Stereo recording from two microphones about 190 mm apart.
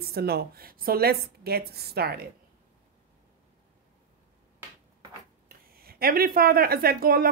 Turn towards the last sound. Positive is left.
turn(degrees=-50)  # may be behind; listen again after turning